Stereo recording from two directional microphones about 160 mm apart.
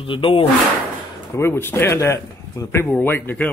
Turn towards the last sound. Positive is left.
turn(degrees=10)  # may be behind; listen again after turning